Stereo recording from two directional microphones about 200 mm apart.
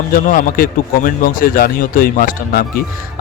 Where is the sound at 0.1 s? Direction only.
45° left (ahead or behind).